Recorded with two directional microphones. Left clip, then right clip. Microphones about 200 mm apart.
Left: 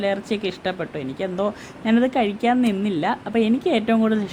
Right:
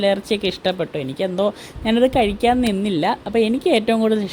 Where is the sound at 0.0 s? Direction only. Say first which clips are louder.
Right 5 dB; 25° right (ahead or behind).